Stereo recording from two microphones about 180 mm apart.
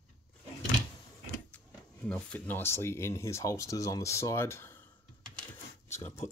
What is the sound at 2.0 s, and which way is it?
Speech, 5° left (ahead or behind).